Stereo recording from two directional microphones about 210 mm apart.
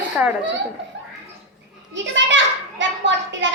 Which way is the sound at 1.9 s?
60° right (ahead or behind).